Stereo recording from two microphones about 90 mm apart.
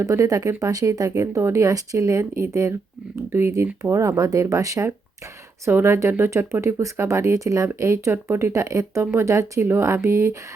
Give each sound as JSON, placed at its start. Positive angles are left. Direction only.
{"t": 0.0, "sound": "speech", "side_deg": -35}